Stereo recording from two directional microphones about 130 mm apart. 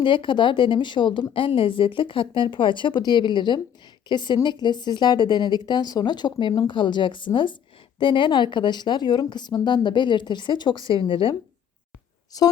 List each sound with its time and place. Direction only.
0.0 s speech: 40° left (ahead or behind)
12.3 s a woman's voice: 30° left (ahead or behind)